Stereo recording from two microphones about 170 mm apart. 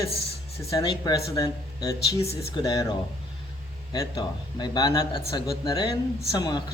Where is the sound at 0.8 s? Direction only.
25° left (ahead or behind).